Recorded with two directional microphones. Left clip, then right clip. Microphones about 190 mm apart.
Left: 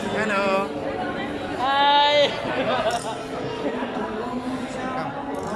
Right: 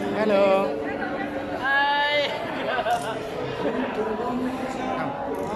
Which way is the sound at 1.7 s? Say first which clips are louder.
Left 4 dB; 20° left (ahead or behind).